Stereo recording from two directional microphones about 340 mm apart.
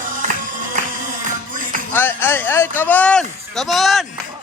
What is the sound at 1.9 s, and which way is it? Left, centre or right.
Speech, centre.